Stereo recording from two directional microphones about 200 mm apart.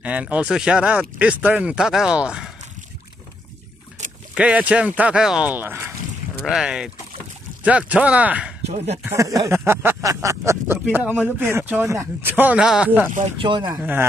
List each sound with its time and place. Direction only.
0.0 s speech: 5° right (ahead or behind)
4.0 s boat: 35° right (ahead or behind)
4.4 s speech: 5° right (ahead or behind)
8.6 s speech: 30° right (ahead or behind)
9.0 s speech: 15° right (ahead or behind)
13.4 s speech: 25° right (ahead or behind)
13.7 s speech: 10° right (ahead or behind)